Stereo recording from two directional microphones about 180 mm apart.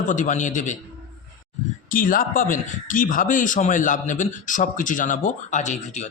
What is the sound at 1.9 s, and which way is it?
A man's voice, 50° left (ahead or behind).